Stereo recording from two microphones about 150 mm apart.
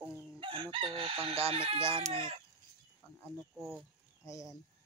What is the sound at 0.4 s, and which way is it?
Chicken, 35° right (ahead or behind).